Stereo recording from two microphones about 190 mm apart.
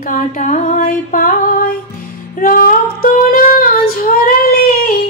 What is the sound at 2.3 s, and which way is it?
Female singing, 45° left (ahead or behind).